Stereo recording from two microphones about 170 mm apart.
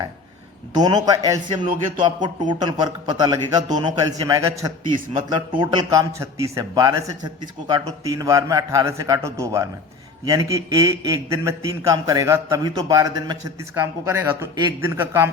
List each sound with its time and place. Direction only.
0.8 s a man's voice: 25° right (ahead or behind)
8.0 s a man's voice: 20° right (ahead or behind)